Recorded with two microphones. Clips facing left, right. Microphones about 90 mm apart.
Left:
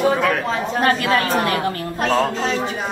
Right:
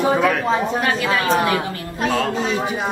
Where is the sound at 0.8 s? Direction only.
45° left (ahead or behind).